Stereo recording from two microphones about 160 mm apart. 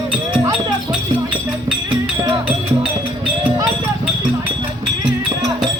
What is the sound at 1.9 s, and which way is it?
Music, 30° right (ahead or behind).